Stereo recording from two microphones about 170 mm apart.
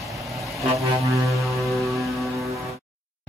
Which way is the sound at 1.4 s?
Centre (ahead or behind).